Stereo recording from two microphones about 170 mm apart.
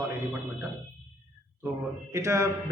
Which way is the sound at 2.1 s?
15° right (ahead or behind).